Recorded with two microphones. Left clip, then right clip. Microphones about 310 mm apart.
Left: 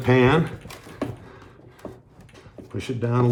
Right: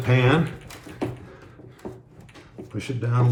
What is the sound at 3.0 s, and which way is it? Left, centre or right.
Speech, left.